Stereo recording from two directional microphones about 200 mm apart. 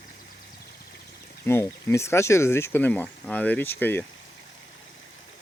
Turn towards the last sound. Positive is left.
turn(degrees=10)  # may be behind; listen again after turning